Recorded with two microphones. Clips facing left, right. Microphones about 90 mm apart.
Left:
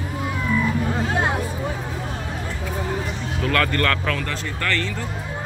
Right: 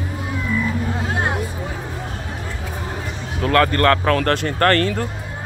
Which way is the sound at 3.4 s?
35° right (ahead or behind).